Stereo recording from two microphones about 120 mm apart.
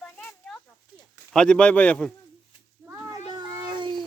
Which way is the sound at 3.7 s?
40° right (ahead or behind).